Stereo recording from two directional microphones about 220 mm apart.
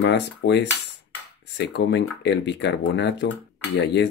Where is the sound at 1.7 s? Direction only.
55° left (ahead or behind).